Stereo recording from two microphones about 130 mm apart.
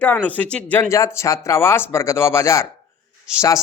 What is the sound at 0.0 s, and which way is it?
Speech, 10° left (ahead or behind).